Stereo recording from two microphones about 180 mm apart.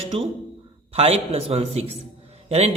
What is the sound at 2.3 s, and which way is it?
Music, 35° right (ahead or behind).